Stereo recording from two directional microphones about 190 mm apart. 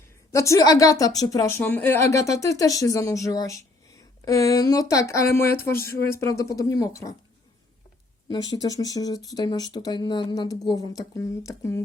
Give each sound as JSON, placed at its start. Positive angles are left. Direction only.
{"t": 0.3, "sound": "speech", "side_deg": 15}
{"t": 8.3, "sound": "speech", "side_deg": 25}